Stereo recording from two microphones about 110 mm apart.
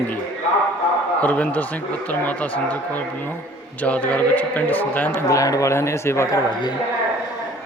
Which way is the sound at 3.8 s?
15° left (ahead or behind).